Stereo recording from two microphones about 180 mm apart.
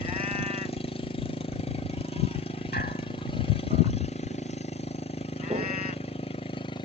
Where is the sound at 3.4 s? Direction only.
35° left (ahead or behind).